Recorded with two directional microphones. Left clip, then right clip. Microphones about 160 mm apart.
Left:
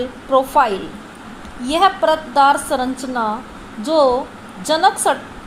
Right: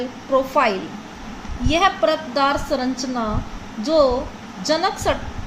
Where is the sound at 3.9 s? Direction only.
15° left (ahead or behind).